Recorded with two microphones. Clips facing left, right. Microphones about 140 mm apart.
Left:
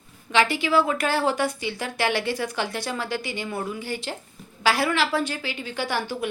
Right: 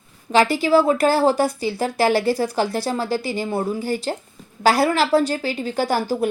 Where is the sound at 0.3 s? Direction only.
40° right (ahead or behind).